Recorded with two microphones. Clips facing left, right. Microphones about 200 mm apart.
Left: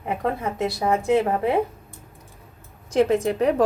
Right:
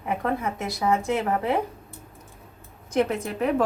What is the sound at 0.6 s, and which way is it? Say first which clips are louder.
Speech: left 3 dB; 30° left (ahead or behind).